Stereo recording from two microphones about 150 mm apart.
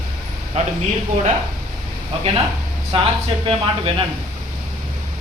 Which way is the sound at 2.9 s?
40° right (ahead or behind).